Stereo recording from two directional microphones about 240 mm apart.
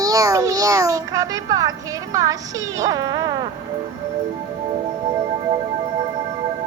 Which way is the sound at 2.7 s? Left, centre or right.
Centre.